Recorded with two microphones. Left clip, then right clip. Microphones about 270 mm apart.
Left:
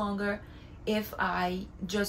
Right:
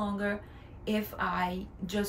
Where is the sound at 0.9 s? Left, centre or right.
Centre.